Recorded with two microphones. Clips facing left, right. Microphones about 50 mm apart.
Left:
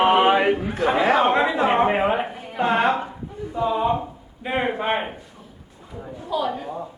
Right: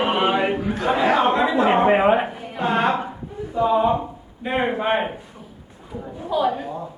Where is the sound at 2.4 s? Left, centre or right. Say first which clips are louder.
Left 1 dB; centre.